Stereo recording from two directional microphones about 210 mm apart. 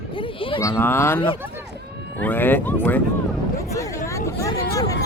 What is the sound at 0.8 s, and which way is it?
Speech, 10° left (ahead or behind).